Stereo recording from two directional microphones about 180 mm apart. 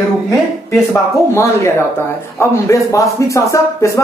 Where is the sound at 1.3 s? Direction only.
15° left (ahead or behind).